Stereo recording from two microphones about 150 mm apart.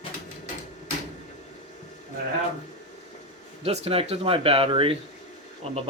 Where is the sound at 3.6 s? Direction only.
45° right (ahead or behind).